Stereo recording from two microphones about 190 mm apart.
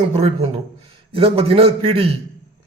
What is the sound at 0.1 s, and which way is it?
A man's voice, 30° right (ahead or behind).